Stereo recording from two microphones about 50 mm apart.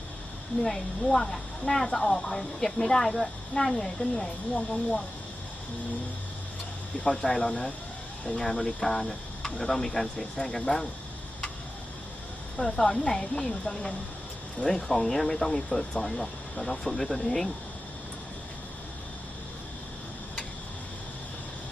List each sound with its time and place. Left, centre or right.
0.6 s speech: centre
7.2 s speech: centre
12.5 s speech: centre